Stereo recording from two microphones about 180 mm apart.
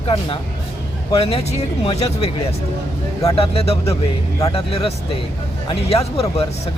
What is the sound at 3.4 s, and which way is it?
Speech, 35° left (ahead or behind).